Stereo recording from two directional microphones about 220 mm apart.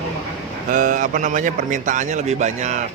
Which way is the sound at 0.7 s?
35° right (ahead or behind).